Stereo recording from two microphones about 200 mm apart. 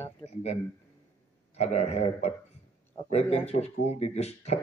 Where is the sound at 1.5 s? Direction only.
30° left (ahead or behind).